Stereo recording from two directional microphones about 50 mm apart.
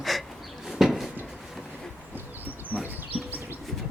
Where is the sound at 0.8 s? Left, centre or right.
Centre.